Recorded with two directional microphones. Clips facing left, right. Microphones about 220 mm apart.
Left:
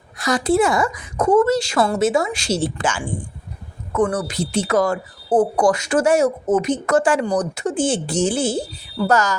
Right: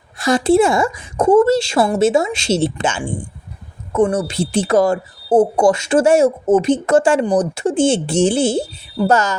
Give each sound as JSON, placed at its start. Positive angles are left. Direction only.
{"t": 0.2, "sound": "speech", "side_deg": -25}